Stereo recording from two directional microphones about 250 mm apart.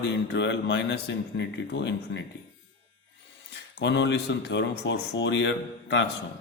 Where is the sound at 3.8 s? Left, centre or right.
Left.